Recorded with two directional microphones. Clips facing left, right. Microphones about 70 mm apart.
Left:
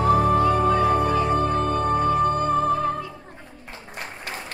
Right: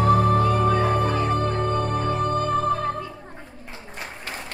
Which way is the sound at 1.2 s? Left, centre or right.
Centre.